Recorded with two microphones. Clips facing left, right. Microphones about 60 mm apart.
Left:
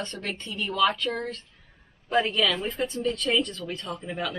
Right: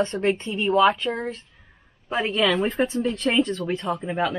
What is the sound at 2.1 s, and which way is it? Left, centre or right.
Speech, centre.